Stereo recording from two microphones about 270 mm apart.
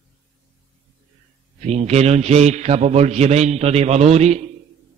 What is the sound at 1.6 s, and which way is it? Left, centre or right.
A man's voice, right.